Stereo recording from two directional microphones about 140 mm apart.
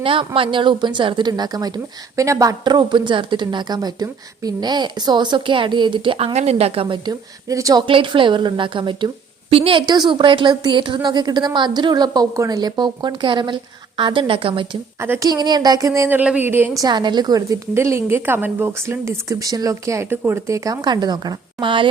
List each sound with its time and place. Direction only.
0.0 s a woman's voice: 40° right (ahead or behind)
9.8 s speech: 30° right (ahead or behind)
15.0 s a woman's voice: 15° right (ahead or behind)
15.3 s a woman's voice: 30° right (ahead or behind)
16.8 s a woman's voice: 30° right (ahead or behind)